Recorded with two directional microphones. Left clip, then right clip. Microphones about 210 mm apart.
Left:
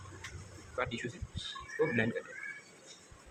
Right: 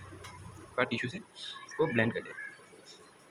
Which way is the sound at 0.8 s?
40° right (ahead or behind).